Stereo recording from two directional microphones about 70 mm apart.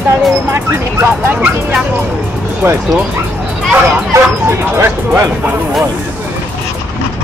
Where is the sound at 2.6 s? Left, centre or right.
Right.